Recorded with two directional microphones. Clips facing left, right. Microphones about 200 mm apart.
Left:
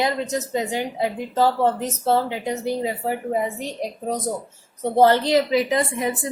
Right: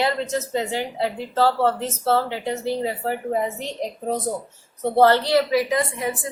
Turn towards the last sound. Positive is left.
turn(degrees=25)  # may be behind; listen again after turning